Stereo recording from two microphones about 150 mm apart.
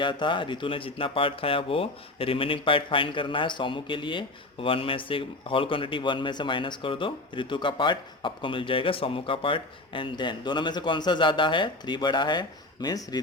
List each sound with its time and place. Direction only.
0.0 s speech: 35° left (ahead or behind)